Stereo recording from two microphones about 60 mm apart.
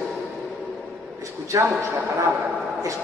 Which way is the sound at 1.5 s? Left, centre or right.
Right.